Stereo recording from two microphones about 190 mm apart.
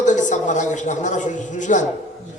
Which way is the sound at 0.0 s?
40° left (ahead or behind).